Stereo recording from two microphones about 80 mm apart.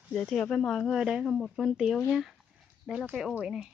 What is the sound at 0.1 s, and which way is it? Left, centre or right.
Speech, centre.